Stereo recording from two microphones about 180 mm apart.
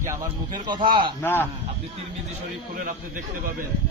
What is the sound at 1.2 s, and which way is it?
Speech, 10° left (ahead or behind).